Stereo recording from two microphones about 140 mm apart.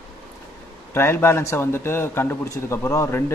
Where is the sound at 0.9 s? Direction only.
15° left (ahead or behind).